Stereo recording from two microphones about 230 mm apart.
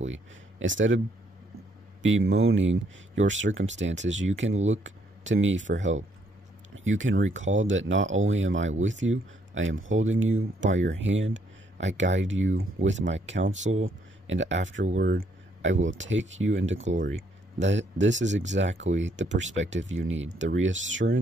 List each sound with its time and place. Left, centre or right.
0.0 s speech: right
2.0 s speech: right
12.5 s speech: right
13.5 s speech: right
13.7 s a sound: right
15.0 s speech: right